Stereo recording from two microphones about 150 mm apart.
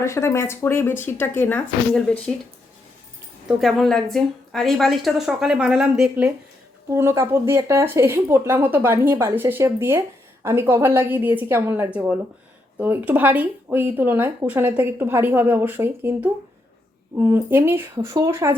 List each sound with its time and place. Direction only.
0.0 s a woman's voice: 20° left (ahead or behind); by 6.3 s 5° right (ahead or behind)
6.9 s speech: 20° right (ahead or behind)